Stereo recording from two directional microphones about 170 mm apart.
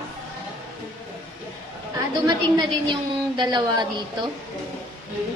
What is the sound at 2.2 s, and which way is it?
A woman's voice, 25° right (ahead or behind).